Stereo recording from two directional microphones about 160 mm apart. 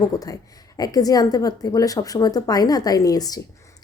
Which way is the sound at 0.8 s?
25° left (ahead or behind).